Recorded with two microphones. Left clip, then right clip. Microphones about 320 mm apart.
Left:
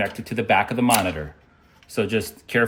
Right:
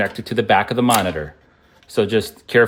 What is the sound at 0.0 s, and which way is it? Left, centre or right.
Speech, right.